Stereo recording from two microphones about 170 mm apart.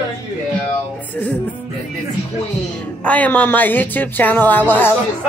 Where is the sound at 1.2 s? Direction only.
10° left (ahead or behind).